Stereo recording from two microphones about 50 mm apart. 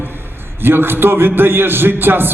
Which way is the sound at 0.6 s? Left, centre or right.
Right.